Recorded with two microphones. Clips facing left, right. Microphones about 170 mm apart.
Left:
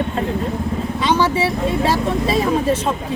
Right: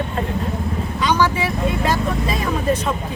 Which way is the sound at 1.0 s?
30° left (ahead or behind).